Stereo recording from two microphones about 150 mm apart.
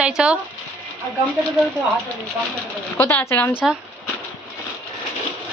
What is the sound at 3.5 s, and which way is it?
Speech, 10° right (ahead or behind).